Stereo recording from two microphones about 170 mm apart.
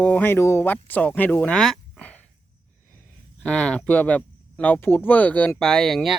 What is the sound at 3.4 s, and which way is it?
Speech, 5° left (ahead or behind).